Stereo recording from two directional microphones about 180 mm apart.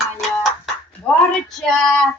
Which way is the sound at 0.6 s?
5° left (ahead or behind).